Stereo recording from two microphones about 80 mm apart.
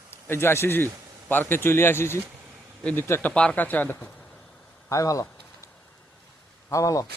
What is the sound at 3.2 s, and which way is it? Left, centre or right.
Speech, centre.